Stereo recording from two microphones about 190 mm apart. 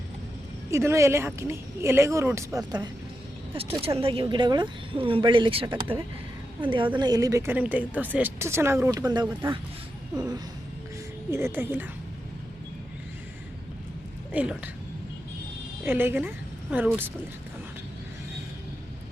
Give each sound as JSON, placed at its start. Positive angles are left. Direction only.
{"t": 0.7, "sound": "a woman's voice", "side_deg": -15}
{"t": 3.8, "sound": "a woman's voice", "side_deg": -30}
{"t": 14.3, "sound": "a woman's voice", "side_deg": -5}
{"t": 15.8, "sound": "a woman's voice", "side_deg": -10}